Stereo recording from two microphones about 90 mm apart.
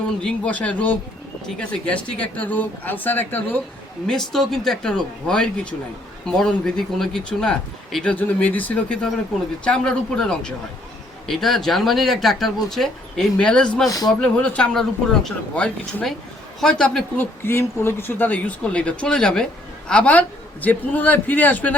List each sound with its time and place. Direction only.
0.2 s speech: 10° left (ahead or behind)
4.0 s speech: 5° left (ahead or behind)
8.0 s speech: 20° left (ahead or behind)
17.2 s speech: 30° left (ahead or behind)